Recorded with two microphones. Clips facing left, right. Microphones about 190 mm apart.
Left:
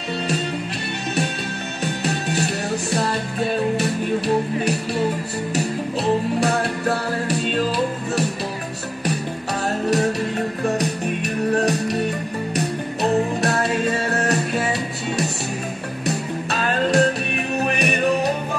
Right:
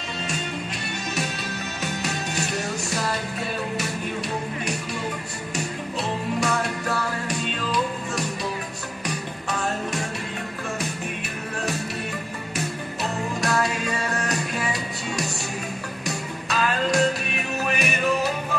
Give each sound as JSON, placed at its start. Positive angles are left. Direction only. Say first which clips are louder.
{"t": 6.4, "sound": "music", "louder": "left 5 dB", "side_deg": 35}
{"t": 9.5, "sound": "music", "louder": "left 6 dB", "side_deg": 40}
{"t": 11.5, "sound": "music", "louder": "left 7 dB", "side_deg": 40}
{"t": 13.8, "sound": "music", "louder": "left 6 dB", "side_deg": 35}
{"t": 16.1, "sound": "music", "louder": "left 6 dB", "side_deg": 35}